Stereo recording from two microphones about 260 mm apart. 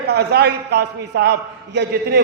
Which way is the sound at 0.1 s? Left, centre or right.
Right.